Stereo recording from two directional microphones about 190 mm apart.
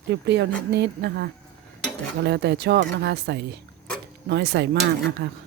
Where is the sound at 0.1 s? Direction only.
65° right (ahead or behind).